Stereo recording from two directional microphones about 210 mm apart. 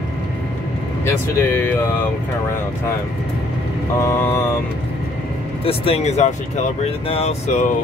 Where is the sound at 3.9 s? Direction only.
10° left (ahead or behind).